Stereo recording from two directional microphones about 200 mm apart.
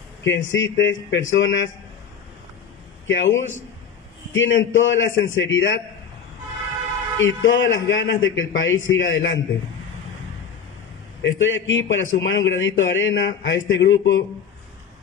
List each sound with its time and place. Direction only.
0.2 s a man's voice: 65° left (ahead or behind)
3.1 s a man's voice: 70° left (ahead or behind)
7.2 s a man's voice: 70° left (ahead or behind)
11.3 s a man's voice: 70° left (ahead or behind)